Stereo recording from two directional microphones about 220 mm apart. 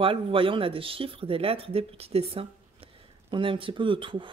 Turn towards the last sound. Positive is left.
turn(degrees=-20)  # may be behind; listen again after turning